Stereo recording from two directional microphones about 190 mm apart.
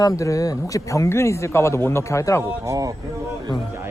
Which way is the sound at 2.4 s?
15° right (ahead or behind).